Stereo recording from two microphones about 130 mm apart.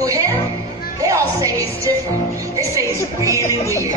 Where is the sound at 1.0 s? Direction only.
25° right (ahead or behind).